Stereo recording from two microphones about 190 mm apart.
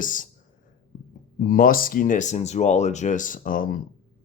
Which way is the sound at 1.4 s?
45° left (ahead or behind).